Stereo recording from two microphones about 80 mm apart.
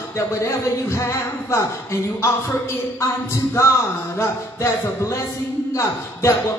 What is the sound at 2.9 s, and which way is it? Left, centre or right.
Music, left.